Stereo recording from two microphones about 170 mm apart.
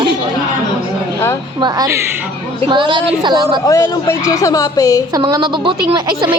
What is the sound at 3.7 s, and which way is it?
A woman's voice, 15° left (ahead or behind).